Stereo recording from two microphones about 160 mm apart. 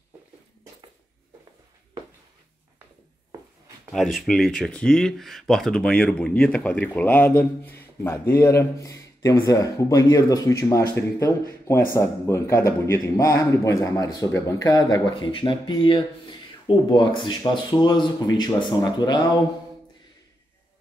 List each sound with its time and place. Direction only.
3.9 s speech: centre (ahead or behind); by 19.4 s 25° left (ahead or behind)